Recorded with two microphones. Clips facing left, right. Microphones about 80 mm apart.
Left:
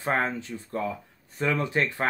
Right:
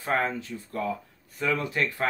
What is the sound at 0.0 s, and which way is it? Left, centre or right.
Speech, left.